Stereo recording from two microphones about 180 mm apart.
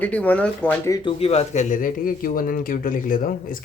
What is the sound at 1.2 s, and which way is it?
Speech, 35° left (ahead or behind).